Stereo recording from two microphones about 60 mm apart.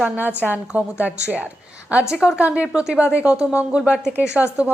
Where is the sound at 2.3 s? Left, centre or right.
Right.